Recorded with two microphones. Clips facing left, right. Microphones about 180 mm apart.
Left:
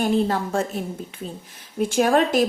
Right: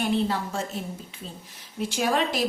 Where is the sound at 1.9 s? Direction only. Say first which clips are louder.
Left 7 dB; 50° left (ahead or behind).